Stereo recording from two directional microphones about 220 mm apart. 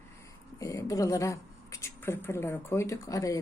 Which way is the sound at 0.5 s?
15° left (ahead or behind).